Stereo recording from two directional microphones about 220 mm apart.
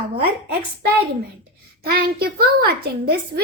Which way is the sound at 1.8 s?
45° right (ahead or behind).